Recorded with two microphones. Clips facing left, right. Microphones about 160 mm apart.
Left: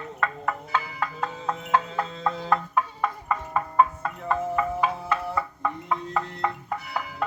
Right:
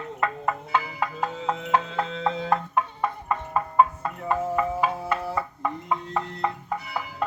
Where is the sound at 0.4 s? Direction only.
15° right (ahead or behind).